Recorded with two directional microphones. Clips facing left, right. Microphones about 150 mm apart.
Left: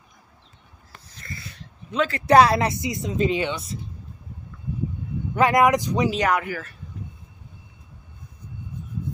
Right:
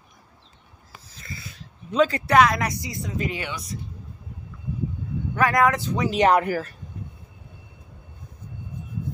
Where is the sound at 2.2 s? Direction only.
30° left (ahead or behind).